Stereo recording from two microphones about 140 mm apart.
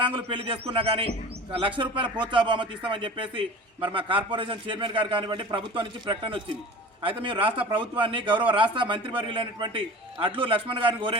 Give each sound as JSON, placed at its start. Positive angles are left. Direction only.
{"t": 0.0, "sound": "speech", "side_deg": -40}